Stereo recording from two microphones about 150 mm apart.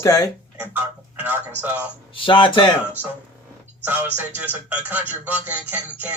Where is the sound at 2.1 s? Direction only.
35° left (ahead or behind).